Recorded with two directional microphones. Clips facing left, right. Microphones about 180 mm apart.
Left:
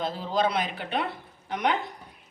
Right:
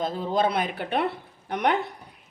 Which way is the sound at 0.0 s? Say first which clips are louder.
Right 2 dB; 50° right (ahead or behind).